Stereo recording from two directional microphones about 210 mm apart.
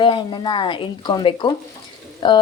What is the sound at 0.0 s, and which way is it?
Speech, 20° left (ahead or behind).